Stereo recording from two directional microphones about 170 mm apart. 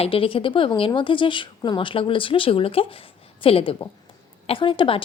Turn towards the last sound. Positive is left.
turn(degrees=30)  # may be behind; listen again after turning